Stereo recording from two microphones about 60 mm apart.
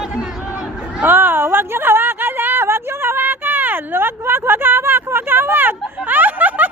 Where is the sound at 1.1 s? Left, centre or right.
Right.